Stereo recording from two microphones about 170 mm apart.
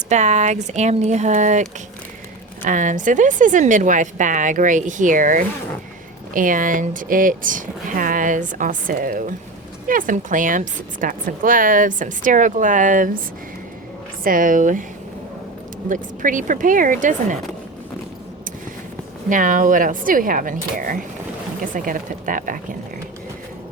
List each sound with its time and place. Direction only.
0.1 s speech: 45° right (ahead or behind)
2.6 s speech: 50° right (ahead or behind)
14.3 s speech: 50° right (ahead or behind)
15.9 s speech: 50° right (ahead or behind)
19.3 s speech: 50° right (ahead or behind)